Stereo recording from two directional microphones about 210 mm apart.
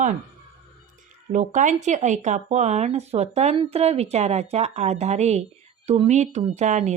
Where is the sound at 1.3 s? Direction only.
35° right (ahead or behind).